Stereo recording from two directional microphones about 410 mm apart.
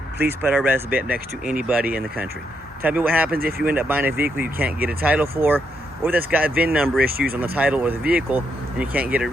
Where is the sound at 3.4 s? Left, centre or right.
Right.